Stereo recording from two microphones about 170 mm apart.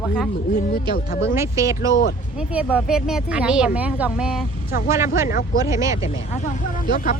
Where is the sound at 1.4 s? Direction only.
20° right (ahead or behind).